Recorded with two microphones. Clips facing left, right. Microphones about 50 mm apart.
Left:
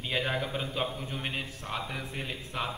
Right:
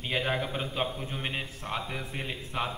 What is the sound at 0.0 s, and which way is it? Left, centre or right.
A man's voice, centre.